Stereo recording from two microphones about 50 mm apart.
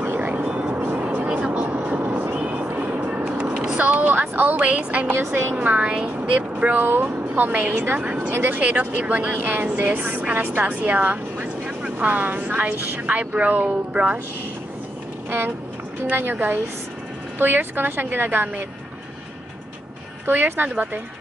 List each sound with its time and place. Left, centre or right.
0.2 s vehicle: right
1.2 s vehicle: right
2.3 s music: right
3.7 s a sound: right
5.0 s a woman's voice: right
5.9 s speech: centre
6.5 s speech: right
15.2 s speech: right
20.2 s speech: right